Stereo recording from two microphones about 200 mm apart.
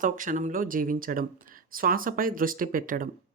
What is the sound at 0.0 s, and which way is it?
Speech, 40° right (ahead or behind).